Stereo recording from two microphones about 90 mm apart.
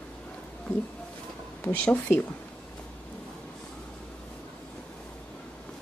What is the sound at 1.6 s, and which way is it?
Speech, 15° left (ahead or behind).